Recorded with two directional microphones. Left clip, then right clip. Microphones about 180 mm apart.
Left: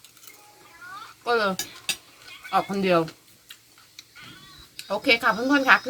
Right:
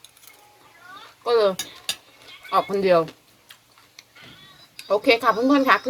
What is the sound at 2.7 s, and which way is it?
Speech, 15° right (ahead or behind).